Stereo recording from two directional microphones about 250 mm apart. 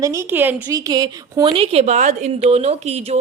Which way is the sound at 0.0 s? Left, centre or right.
Centre.